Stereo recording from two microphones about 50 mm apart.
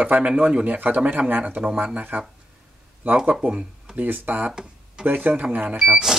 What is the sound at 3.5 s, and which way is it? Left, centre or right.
Speech, centre.